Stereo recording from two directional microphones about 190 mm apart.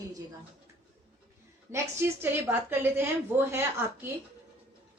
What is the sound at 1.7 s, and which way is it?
A woman's voice, 10° right (ahead or behind).